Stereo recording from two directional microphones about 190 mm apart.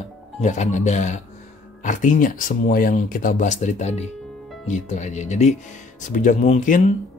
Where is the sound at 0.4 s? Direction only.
40° left (ahead or behind).